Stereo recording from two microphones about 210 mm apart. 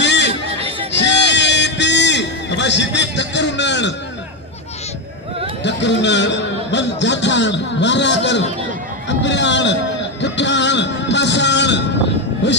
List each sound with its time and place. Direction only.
0.0 s chatter: 55° left (ahead or behind)
0.9 s music: 55° left (ahead or behind)
5.6 s speech: 55° left (ahead or behind)